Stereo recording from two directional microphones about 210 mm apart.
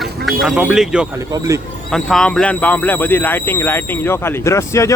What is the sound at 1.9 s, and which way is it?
Speech, centre (ahead or behind).